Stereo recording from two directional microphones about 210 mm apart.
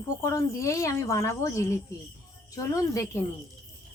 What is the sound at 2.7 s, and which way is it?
Speech, 15° left (ahead or behind).